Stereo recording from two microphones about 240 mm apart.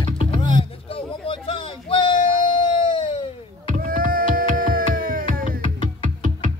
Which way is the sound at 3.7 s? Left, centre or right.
Right.